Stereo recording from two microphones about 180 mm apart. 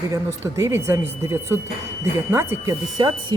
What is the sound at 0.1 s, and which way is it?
Speech, 15° right (ahead or behind).